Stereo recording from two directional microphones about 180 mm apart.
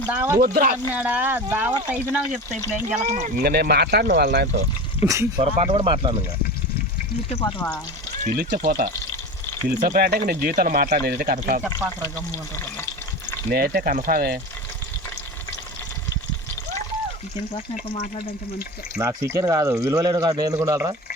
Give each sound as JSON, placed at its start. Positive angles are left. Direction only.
{"t": 0.1, "sound": "speech", "side_deg": -10}
{"t": 0.3, "sound": "speech", "side_deg": -55}
{"t": 0.9, "sound": "speech", "side_deg": -10}
{"t": 3.0, "sound": "speech", "side_deg": -45}
{"t": 3.4, "sound": "speech", "side_deg": -60}
{"t": 5.0, "sound": "speech", "side_deg": -15}
{"t": 5.4, "sound": "speech", "side_deg": -35}
{"t": 8.2, "sound": "speech", "side_deg": -50}
{"t": 13.5, "sound": "speech", "side_deg": -55}
{"t": 18.9, "sound": "a man's voice", "side_deg": -15}